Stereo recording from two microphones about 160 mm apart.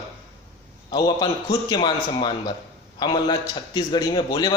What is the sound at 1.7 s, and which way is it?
Speech, 25° left (ahead or behind).